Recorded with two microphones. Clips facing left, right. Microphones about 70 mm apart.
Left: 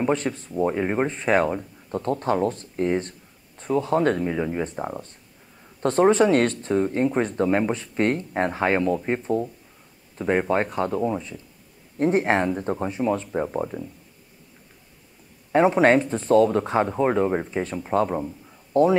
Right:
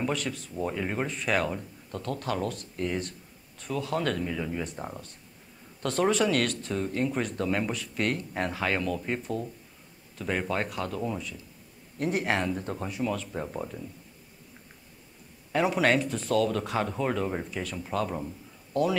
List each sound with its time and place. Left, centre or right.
0.0 s speech: left
15.5 s a man's voice: left